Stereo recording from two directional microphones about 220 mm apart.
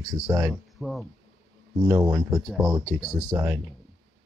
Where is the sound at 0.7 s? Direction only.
Centre (ahead or behind).